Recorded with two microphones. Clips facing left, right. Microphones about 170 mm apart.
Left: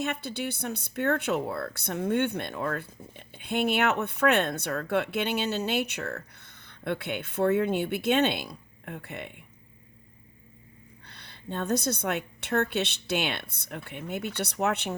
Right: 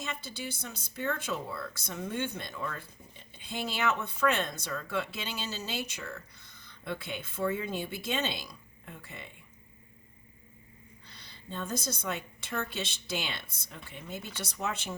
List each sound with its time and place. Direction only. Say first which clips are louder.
0.0 s speech: left 8 dB; 60° left (ahead or behind)
11.0 s speech: left 9 dB; 60° left (ahead or behind)